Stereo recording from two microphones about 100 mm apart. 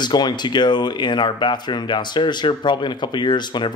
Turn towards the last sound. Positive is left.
turn(degrees=50)  # may be behind; listen again after turning